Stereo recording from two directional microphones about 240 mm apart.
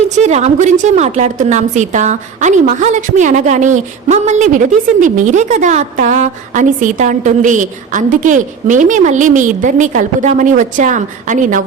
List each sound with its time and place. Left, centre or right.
0.2 s a woman's voice: right